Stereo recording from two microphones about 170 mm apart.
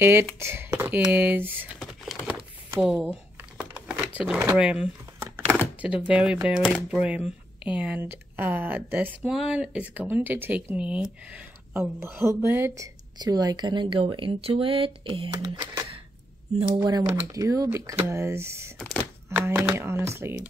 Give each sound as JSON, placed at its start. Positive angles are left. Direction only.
{"t": 0.0, "sound": "speech", "side_deg": -15}
{"t": 1.8, "sound": "a sound", "side_deg": 0}
{"t": 6.9, "sound": "speech", "side_deg": -5}